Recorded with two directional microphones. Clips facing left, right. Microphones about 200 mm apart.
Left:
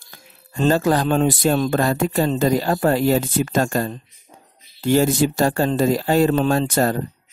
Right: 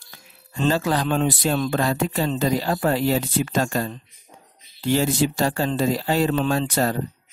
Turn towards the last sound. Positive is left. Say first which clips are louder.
# left 3 dB
turn(degrees=45)  # may be behind; listen again after turning